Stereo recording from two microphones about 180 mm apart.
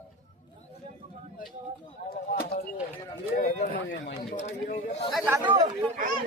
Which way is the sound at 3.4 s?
45° left (ahead or behind).